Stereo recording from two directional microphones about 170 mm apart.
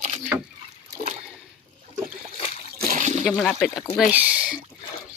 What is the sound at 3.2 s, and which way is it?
Speech, centre (ahead or behind).